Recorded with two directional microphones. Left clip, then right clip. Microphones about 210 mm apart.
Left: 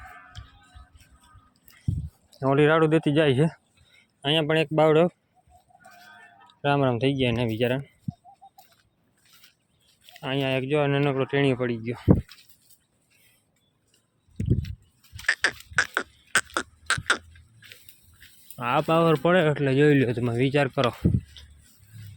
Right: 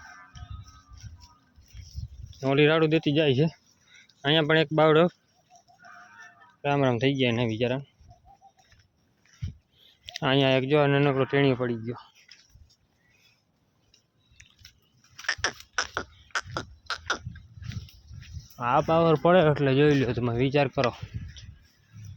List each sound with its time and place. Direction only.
2.4 s speech: 10° right (ahead or behind)
6.6 s speech: 5° left (ahead or behind)
10.1 s speech: 20° right (ahead or behind); by 12.0 s 10° left (ahead or behind)
15.1 s a sound: 10° left (ahead or behind)
16.3 s a sound: 25° left (ahead or behind)
18.5 s speech: 10° left (ahead or behind)